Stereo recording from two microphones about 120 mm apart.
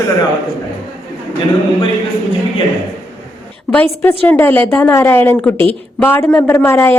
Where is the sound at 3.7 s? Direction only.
10° left (ahead or behind).